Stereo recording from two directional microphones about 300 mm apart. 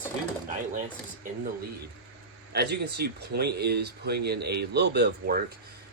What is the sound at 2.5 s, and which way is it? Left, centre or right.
Speech, right.